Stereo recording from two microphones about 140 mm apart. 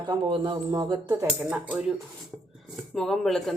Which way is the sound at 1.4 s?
10° right (ahead or behind).